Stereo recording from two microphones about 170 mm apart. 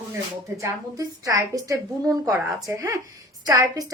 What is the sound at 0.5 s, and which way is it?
A woman's voice, 20° right (ahead or behind).